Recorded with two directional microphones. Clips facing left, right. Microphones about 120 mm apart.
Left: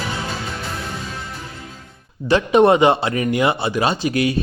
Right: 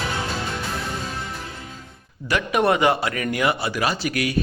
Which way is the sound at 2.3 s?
25° left (ahead or behind).